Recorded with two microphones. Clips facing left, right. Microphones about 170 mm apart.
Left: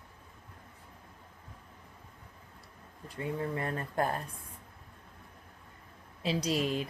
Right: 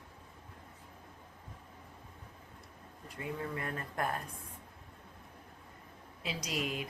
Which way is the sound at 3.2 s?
30° left (ahead or behind).